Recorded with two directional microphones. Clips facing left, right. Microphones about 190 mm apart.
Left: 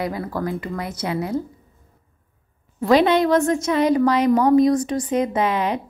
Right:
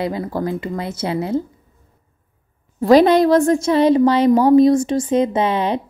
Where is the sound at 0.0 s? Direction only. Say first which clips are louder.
Right 3 dB; 25° right (ahead or behind).